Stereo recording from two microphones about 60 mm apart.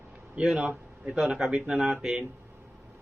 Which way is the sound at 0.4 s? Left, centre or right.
Centre.